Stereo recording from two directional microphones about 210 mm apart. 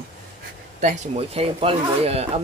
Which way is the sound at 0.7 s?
35° right (ahead or behind).